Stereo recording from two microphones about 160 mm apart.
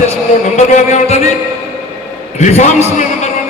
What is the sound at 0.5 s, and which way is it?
Speech, 50° left (ahead or behind).